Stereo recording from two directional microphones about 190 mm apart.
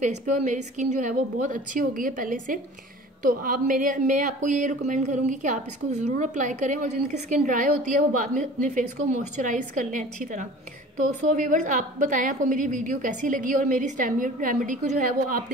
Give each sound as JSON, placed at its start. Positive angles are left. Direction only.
{"t": 0.0, "sound": "a woman's voice", "side_deg": -40}